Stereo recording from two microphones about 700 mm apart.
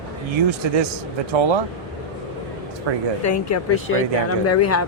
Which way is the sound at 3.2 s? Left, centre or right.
Left.